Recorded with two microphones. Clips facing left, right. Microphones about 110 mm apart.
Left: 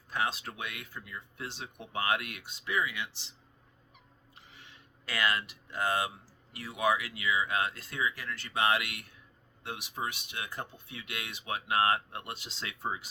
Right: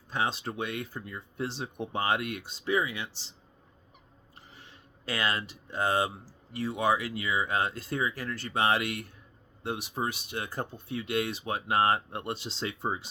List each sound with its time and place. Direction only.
0.1 s speech: 25° right (ahead or behind)
4.4 s speech: 35° right (ahead or behind)